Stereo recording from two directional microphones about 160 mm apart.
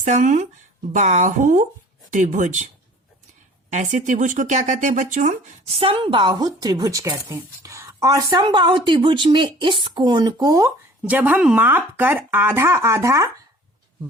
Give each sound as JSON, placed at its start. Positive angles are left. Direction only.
{"t": 0.0, "sound": "speech", "side_deg": -50}
{"t": 3.7, "sound": "speech", "side_deg": -45}
{"t": 5.7, "sound": "a woman's voice", "side_deg": -35}
{"t": 11.1, "sound": "speech", "side_deg": -10}